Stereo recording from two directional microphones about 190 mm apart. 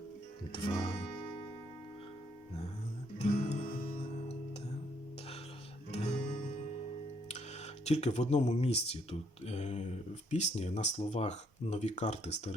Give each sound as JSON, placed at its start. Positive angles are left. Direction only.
{"t": 0.5, "sound": "music", "side_deg": 25}
{"t": 3.2, "sound": "music", "side_deg": 35}
{"t": 5.9, "sound": "guitar", "side_deg": 35}
{"t": 7.9, "sound": "speech", "side_deg": 35}